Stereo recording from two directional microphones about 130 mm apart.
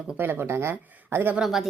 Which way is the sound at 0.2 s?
15° right (ahead or behind).